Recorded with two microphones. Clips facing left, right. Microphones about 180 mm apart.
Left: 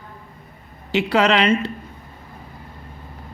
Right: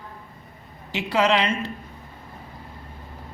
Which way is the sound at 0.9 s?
70° left (ahead or behind).